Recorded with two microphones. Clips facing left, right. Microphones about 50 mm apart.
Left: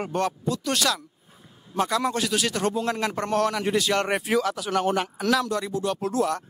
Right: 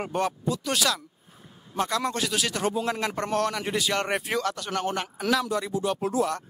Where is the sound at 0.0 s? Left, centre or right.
Centre.